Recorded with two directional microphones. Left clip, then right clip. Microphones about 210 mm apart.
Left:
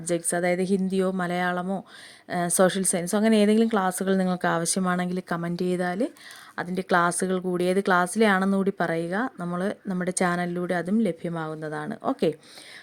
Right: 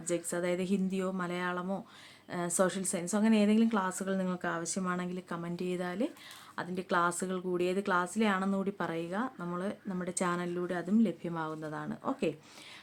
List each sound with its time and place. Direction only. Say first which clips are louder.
0.0 s a woman's voice: left 8 dB; 30° left (ahead or behind)